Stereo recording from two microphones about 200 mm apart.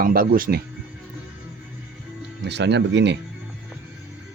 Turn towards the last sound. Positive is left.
turn(degrees=-60)  # may be behind; listen again after turning